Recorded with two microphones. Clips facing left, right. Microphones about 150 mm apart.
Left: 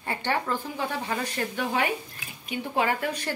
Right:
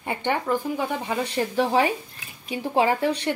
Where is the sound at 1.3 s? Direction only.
30° right (ahead or behind).